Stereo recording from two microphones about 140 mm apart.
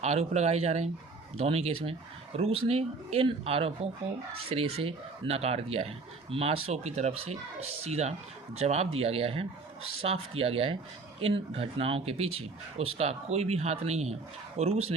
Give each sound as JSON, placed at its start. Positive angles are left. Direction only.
{"t": 0.0, "sound": "speech", "side_deg": -50}